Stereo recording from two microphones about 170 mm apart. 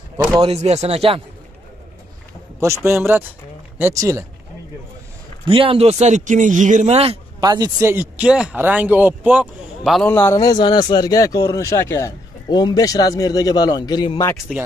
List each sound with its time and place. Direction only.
0.4 s speech: 35° right (ahead or behind)
2.6 s speech: 15° right (ahead or behind)
5.5 s speech: 30° right (ahead or behind); by 10.0 s 5° right (ahead or behind)
10.1 s speech: 20° left (ahead or behind)
14.5 s speech: 5° right (ahead or behind)